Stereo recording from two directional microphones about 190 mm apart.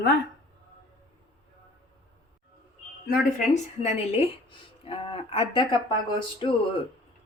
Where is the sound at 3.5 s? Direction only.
35° left (ahead or behind).